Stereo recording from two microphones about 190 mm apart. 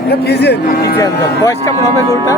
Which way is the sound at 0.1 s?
60° left (ahead or behind).